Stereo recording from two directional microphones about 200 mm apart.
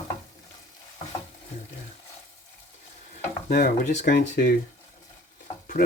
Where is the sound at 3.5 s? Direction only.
45° left (ahead or behind).